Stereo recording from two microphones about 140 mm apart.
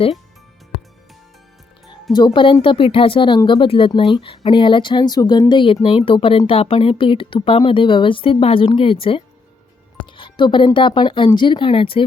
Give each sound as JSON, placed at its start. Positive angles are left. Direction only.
{"t": 2.1, "sound": "speech", "side_deg": 35}